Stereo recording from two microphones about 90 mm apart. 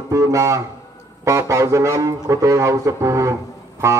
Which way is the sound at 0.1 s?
35° right (ahead or behind).